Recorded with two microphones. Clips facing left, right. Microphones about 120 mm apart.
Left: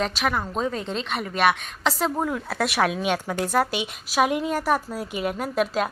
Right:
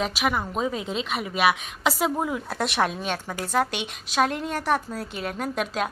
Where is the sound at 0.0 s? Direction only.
5° right (ahead or behind).